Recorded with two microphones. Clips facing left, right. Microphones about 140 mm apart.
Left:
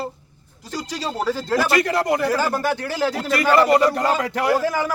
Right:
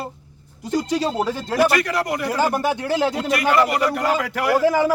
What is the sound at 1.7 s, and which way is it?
Speech, 25° left (ahead or behind).